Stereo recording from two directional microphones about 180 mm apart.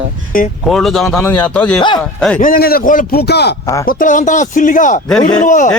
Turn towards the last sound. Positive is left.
turn(degrees=45)  # may be behind; listen again after turning